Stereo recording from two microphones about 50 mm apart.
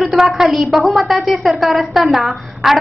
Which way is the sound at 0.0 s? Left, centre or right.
Centre.